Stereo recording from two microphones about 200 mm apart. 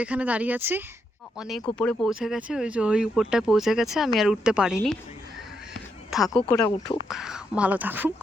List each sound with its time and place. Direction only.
0.0 s speech: 5° right (ahead or behind)
6.1 s speech: centre (ahead or behind)
6.5 s speech: 20° left (ahead or behind)
6.8 s speech: centre (ahead or behind)